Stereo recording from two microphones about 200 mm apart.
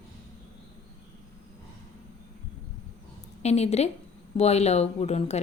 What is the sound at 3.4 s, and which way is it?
Speech, 35° left (ahead or behind).